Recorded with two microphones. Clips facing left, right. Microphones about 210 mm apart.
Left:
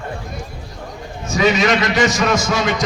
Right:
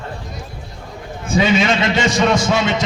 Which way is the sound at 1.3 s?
30° right (ahead or behind).